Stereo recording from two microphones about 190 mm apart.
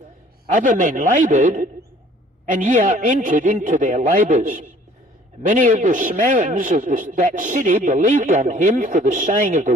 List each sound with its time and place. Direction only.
0.5 s a man's voice: 45° right (ahead or behind)